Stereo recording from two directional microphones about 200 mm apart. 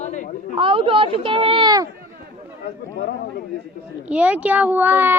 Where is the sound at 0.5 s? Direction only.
25° right (ahead or behind).